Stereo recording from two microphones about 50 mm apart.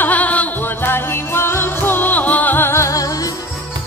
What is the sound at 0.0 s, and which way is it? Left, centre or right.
Music, left.